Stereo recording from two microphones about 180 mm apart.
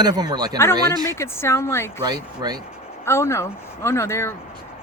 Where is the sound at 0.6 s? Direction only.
15° left (ahead or behind).